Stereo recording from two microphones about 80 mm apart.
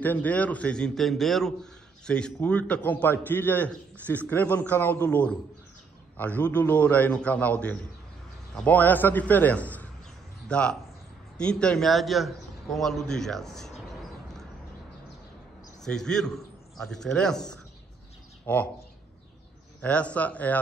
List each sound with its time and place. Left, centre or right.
0.0 s a man's voice: left
11.9 s a man's voice: centre
15.8 s a man's voice: centre
18.5 s a man's voice: centre
19.8 s a man's voice: centre